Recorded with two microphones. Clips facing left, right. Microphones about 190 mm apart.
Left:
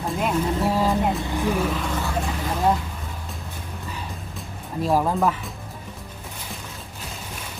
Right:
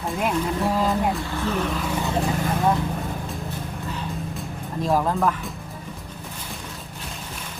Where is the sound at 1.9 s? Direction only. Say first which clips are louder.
Right 2 dB; 15° right (ahead or behind).